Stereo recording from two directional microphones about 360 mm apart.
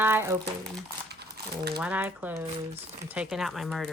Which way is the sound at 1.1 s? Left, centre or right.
Right.